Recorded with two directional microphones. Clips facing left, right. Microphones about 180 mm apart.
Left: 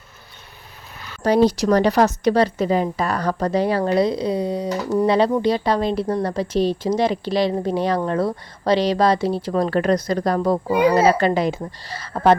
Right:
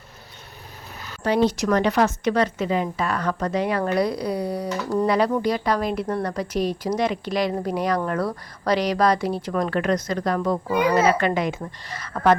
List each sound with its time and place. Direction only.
1.2 s a woman's voice: 40° left (ahead or behind)